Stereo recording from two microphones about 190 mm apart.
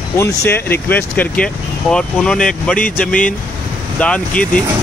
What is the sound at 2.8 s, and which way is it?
Speech, 45° left (ahead or behind).